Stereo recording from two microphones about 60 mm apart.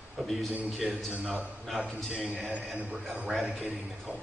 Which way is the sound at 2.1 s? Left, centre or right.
Centre.